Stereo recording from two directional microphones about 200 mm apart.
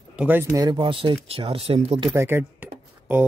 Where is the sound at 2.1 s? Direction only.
10° right (ahead or behind).